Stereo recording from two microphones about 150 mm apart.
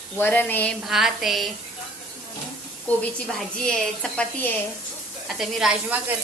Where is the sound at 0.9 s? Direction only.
Centre (ahead or behind).